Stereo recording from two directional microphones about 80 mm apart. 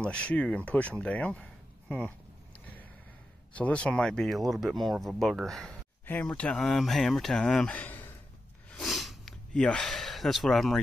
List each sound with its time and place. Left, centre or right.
0.0 s speech: centre
3.5 s speech: centre
6.2 s speech: centre
7.7 s a sound: left
8.8 s sniff: centre
9.5 s speech: centre